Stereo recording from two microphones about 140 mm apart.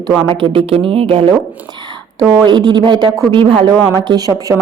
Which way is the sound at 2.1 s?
25° right (ahead or behind).